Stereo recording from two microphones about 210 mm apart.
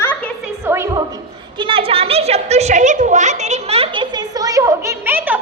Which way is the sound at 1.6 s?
25° right (ahead or behind).